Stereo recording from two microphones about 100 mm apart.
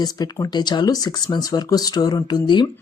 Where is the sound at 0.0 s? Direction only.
40° left (ahead or behind).